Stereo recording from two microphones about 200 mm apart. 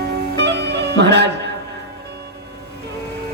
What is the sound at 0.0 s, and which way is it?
Music, 60° right (ahead or behind).